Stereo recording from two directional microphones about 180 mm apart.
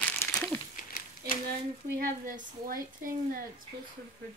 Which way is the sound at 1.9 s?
50° right (ahead or behind).